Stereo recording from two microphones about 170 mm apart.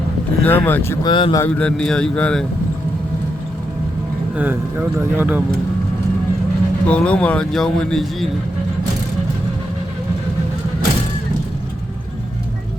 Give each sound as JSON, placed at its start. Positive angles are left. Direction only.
{"t": 0.4, "sound": "speech", "side_deg": 10}
{"t": 1.0, "sound": "speech", "side_deg": 25}
{"t": 1.4, "sound": "a man's voice", "side_deg": 5}
{"t": 4.4, "sound": "speech", "side_deg": -10}
{"t": 6.8, "sound": "a man's voice", "side_deg": 5}